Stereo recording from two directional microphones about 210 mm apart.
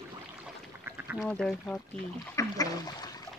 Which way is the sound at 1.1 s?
5° left (ahead or behind).